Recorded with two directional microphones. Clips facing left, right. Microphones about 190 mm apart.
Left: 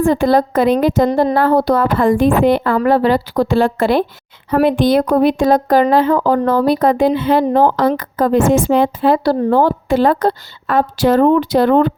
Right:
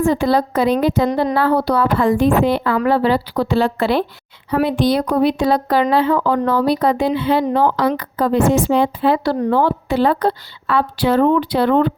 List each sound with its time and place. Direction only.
0.0 s speech: 50° left (ahead or behind)